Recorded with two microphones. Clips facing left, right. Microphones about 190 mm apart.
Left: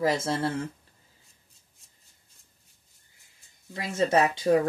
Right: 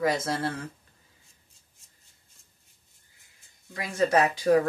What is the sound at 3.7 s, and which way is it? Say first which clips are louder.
Speech: even; 25° left (ahead or behind).